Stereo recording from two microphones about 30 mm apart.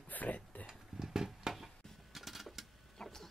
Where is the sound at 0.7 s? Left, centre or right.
Centre.